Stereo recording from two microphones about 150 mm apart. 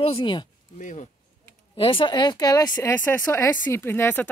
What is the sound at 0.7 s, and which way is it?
Speech, 55° left (ahead or behind).